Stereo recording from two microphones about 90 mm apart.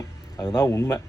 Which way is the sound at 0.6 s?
30° left (ahead or behind).